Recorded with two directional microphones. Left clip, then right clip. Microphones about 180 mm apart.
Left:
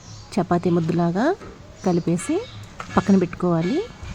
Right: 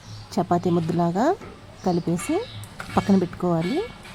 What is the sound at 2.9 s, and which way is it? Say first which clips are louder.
Speech: left 2 dB; 15° left (ahead or behind).